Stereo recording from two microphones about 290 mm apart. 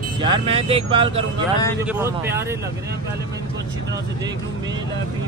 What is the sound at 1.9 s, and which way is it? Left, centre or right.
Speech, centre.